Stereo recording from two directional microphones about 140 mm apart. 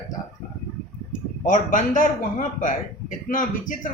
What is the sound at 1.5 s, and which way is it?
Speech, 70° left (ahead or behind).